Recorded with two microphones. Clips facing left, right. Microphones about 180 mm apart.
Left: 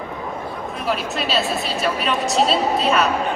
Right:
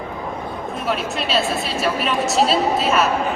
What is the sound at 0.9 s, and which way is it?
A woman's voice, centre (ahead or behind).